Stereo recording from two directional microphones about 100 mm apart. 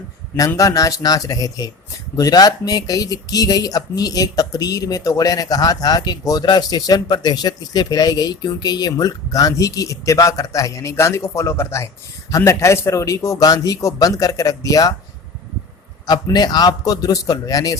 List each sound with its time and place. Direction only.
0.3 s speech: 35° left (ahead or behind)
16.0 s speech: 45° left (ahead or behind)